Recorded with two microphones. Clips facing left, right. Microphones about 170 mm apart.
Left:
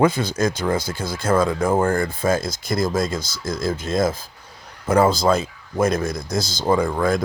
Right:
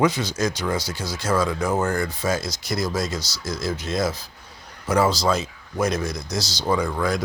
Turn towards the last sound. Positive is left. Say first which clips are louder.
# left 4 dB
turn(degrees=50)  # may be behind; listen again after turning